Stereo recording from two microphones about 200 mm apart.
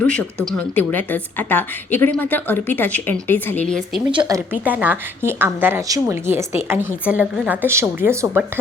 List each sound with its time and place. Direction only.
0.0 s a woman's voice: 5° left (ahead or behind)
4.1 s speech: 25° right (ahead or behind)
4.6 s a woman's voice: 10° right (ahead or behind)